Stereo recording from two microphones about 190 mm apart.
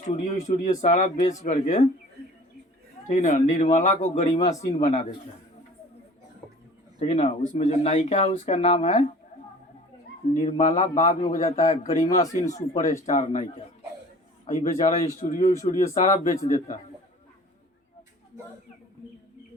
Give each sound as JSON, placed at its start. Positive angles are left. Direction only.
{"t": 0.0, "sound": "speech", "side_deg": 40}
{"t": 3.1, "sound": "speech", "side_deg": 40}
{"t": 7.0, "sound": "speech", "side_deg": 35}
{"t": 10.3, "sound": "speech", "side_deg": 35}
{"t": 12.0, "sound": "speech", "side_deg": 20}
{"t": 12.3, "sound": "speech", "side_deg": 40}
{"t": 12.5, "sound": "speech", "side_deg": 15}
{"t": 13.1, "sound": "speech", "side_deg": 40}
{"t": 16.3, "sound": "speech", "side_deg": 15}